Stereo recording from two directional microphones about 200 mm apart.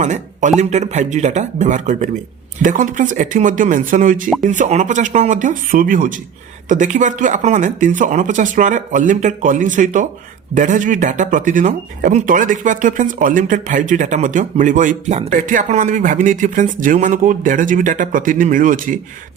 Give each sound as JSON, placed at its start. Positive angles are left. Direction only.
{"t": 0.0, "sound": "speech", "side_deg": -35}